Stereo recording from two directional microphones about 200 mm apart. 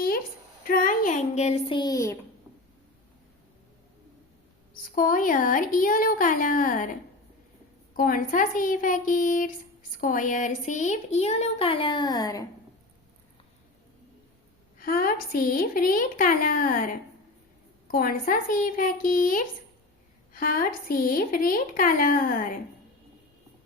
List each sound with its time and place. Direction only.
0.6 s speech: 45° left (ahead or behind); by 2.1 s 15° left (ahead or behind)
4.7 s a woman's voice: 45° left (ahead or behind)
7.9 s speech: 45° left (ahead or behind); by 12.5 s 20° left (ahead or behind)
14.8 s a woman's voice: 45° left (ahead or behind)
17.9 s a woman's voice: 45° left (ahead or behind)